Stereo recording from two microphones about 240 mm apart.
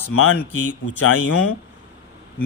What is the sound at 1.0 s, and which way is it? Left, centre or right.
Speech, left.